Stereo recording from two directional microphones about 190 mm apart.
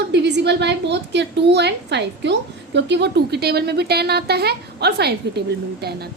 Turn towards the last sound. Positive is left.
turn(degrees=-55)  # may be behind; listen again after turning